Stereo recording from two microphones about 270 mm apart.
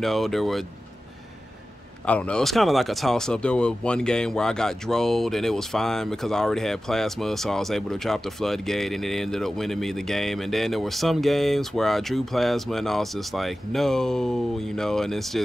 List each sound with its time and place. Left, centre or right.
0.0 s speech: centre
2.0 s speech: centre